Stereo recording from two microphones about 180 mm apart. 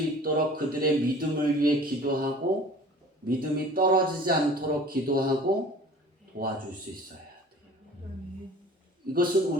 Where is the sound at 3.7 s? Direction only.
55° right (ahead or behind).